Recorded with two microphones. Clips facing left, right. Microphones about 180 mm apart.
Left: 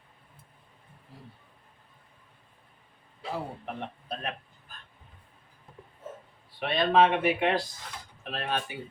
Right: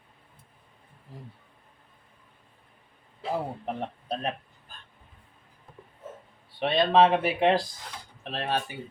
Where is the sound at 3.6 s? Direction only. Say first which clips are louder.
Right 4 dB; 30° right (ahead or behind).